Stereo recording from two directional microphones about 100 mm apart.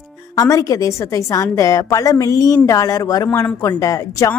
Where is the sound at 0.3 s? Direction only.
35° left (ahead or behind).